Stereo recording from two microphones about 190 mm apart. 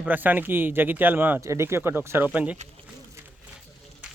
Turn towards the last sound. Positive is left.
turn(degrees=-5)  # may be behind; listen again after turning